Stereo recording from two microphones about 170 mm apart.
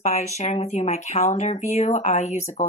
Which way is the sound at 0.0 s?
40° left (ahead or behind).